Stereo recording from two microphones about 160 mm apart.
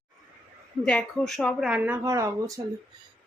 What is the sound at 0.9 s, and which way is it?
Speech, 5° left (ahead or behind).